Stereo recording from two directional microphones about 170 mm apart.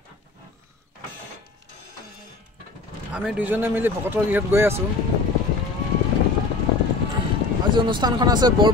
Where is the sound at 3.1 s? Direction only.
5° right (ahead or behind).